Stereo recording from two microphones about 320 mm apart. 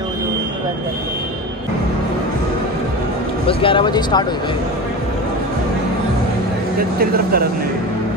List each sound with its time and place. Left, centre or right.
3.4 s speech: centre
6.8 s speech: right